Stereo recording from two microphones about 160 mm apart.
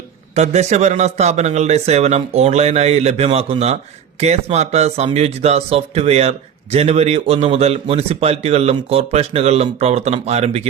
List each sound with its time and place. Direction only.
0.3 s a man's voice: 45° right (ahead or behind)